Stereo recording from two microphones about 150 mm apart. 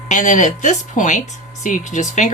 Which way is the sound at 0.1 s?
60° left (ahead or behind).